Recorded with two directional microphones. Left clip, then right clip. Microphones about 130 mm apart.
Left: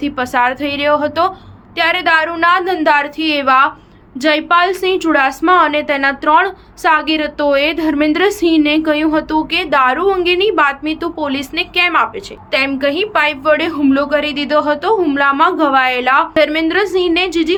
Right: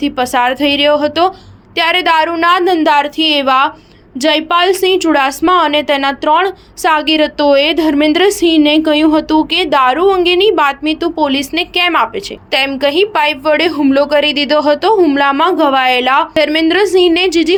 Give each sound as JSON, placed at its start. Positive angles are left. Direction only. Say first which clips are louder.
{"t": 0.0, "sound": "a woman's voice", "louder": "right 2 dB", "side_deg": -40}